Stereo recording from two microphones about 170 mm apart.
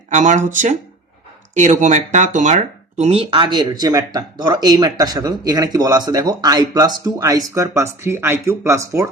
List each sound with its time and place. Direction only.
0.1 s speech: 45° right (ahead or behind); by 9.0 s 15° right (ahead or behind)